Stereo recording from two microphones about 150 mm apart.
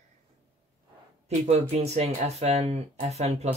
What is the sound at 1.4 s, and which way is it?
Speech, 45° right (ahead or behind).